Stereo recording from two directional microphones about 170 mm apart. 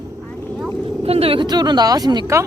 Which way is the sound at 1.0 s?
35° right (ahead or behind).